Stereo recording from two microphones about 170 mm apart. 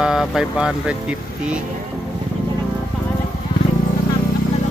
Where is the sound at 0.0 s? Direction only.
5° right (ahead or behind).